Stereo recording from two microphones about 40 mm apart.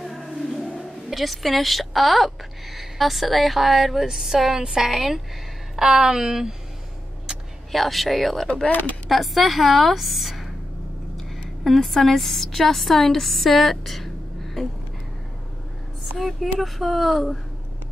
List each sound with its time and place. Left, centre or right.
0.0 s a sound: centre
0.7 s a woman's voice: centre
7.7 s a woman's voice: centre
16.2 s a woman's voice: centre